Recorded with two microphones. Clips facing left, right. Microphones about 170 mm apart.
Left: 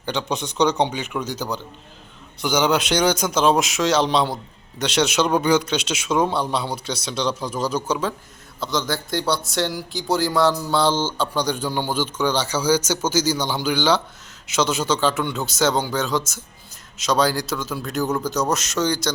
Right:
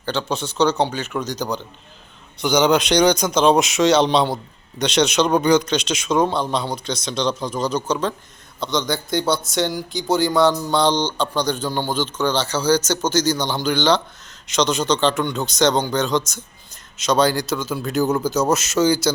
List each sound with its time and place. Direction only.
0.0 s a man's voice: 15° left (ahead or behind); by 19.1 s 5° right (ahead or behind)